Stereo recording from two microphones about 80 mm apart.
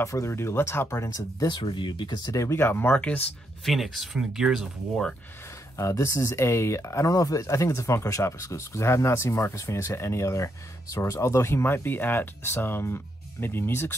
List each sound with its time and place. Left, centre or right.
0.0 s speech: left
1.5 s speech: left
2.3 s speech: left
3.6 s speech: centre
5.8 s speech: left
7.1 s speech: left